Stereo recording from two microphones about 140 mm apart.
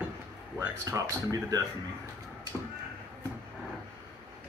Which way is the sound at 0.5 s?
20° right (ahead or behind).